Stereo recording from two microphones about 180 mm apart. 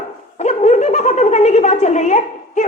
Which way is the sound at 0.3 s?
40° left (ahead or behind).